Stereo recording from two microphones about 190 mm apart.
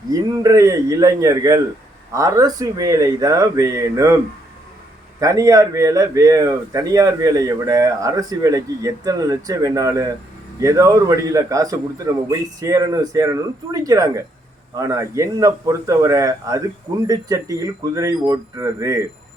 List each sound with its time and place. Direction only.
0.1 s speech: 15° right (ahead or behind)
5.2 s speech: 15° right (ahead or behind)